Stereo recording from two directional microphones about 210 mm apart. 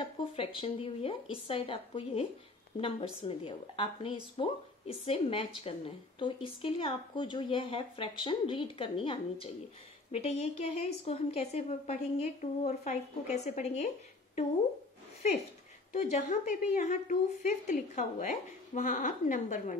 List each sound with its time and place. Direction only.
0.2 s a woman's voice: 25° left (ahead or behind)
15.9 s a woman's voice: 35° left (ahead or behind)